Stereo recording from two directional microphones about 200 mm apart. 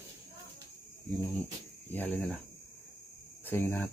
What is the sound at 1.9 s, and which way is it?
Speech, 10° left (ahead or behind).